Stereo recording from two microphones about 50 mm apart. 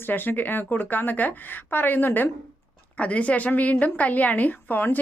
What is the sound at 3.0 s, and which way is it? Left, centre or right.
Speech, left.